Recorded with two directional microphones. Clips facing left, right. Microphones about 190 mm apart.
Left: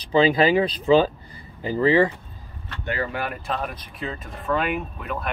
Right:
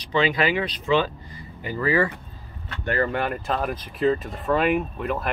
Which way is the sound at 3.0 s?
5° left (ahead or behind).